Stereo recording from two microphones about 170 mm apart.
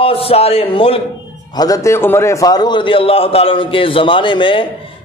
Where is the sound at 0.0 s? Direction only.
35° left (ahead or behind).